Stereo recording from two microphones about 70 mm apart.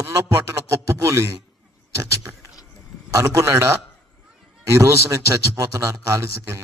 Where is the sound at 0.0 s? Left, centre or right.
Right.